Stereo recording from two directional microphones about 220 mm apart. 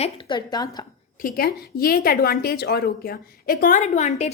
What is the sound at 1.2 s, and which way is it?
A woman's voice, 40° left (ahead or behind).